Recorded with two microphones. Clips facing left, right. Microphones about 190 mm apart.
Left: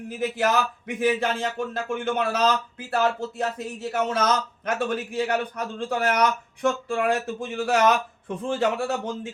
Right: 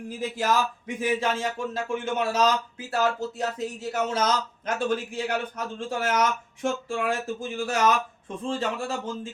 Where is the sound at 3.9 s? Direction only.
60° left (ahead or behind).